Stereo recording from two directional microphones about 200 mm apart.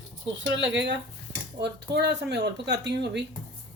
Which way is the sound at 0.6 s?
65° right (ahead or behind).